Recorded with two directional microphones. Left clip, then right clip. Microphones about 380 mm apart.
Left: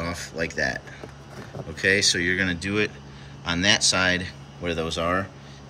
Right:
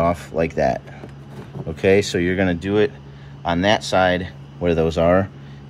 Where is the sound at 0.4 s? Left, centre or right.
Centre.